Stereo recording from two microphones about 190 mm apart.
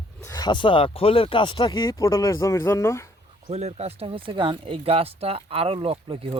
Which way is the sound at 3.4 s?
35° right (ahead or behind).